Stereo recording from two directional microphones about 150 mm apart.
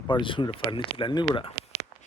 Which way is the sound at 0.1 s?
35° left (ahead or behind).